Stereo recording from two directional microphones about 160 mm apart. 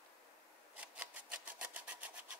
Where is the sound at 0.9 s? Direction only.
10° right (ahead or behind).